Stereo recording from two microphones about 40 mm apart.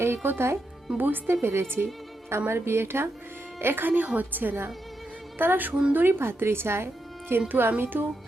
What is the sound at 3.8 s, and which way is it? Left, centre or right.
A woman's voice, right.